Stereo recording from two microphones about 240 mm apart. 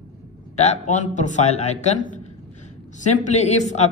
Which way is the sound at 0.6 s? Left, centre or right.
Left.